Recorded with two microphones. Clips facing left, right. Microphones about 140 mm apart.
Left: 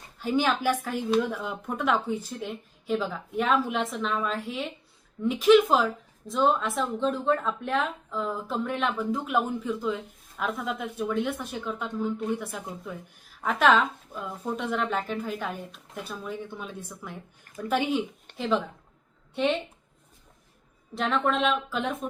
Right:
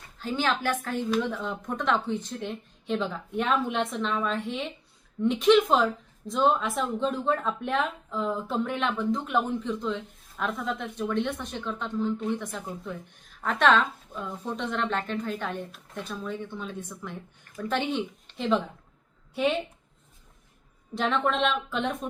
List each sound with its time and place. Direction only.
0.2 s a woman's voice: 10° left (ahead or behind); by 19.5 s 5° right (ahead or behind)
20.9 s a woman's voice: centre (ahead or behind)